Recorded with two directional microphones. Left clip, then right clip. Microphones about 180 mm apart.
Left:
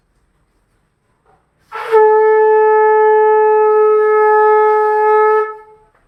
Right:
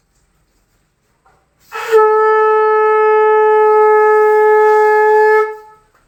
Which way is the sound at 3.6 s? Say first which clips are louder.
Right 1 dB; 20° right (ahead or behind).